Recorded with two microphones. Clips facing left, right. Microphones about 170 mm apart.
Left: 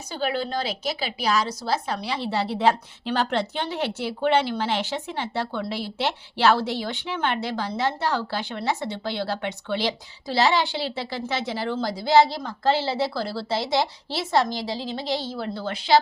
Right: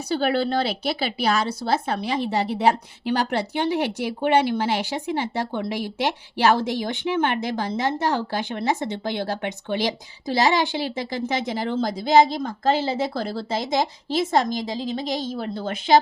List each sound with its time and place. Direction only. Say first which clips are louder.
0.1 s speech: right 5 dB; 65° right (ahead or behind)
2.2 s a woman's voice: even; 15° right (ahead or behind)
13.3 s a woman's voice: even; 45° right (ahead or behind)
14.8 s a woman's voice: right 3 dB; 15° right (ahead or behind)
15.0 s a woman's voice: right 1 dB; 45° right (ahead or behind)